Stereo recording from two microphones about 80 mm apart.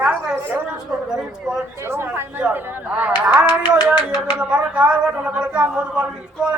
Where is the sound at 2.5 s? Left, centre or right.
Centre.